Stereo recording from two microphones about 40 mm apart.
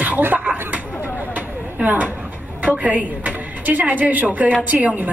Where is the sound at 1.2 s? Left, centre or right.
Right.